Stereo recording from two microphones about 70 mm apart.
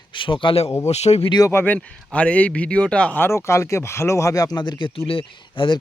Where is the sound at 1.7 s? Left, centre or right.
Centre.